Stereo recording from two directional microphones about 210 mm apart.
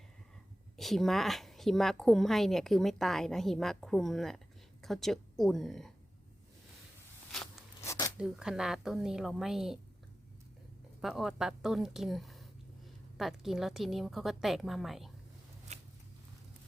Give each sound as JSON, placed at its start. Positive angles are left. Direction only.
{"t": 0.8, "sound": "a woman's voice", "side_deg": 0}
{"t": 7.9, "sound": "zipper", "side_deg": 15}
{"t": 8.2, "sound": "a woman's voice", "side_deg": -5}
{"t": 11.0, "sound": "a woman's voice", "side_deg": 0}
{"t": 15.7, "sound": "a sound", "side_deg": -30}